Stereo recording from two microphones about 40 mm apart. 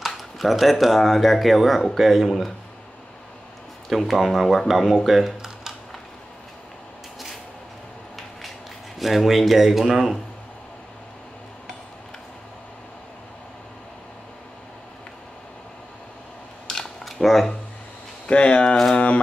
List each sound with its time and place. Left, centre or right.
0.0 s speech: centre
3.9 s speech: centre
9.0 s speech: centre
16.7 s a sound: centre
17.0 s camera: centre
18.2 s speech: left